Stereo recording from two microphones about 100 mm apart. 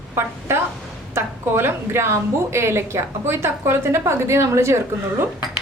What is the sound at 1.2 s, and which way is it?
A woman's voice, 25° right (ahead or behind).